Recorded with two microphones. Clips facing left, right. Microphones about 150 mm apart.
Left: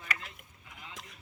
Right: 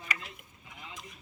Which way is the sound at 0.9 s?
80° left.